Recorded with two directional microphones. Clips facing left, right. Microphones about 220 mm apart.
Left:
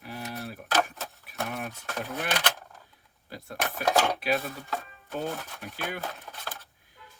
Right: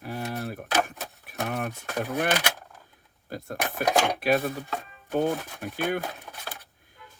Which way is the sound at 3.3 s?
50° right (ahead or behind).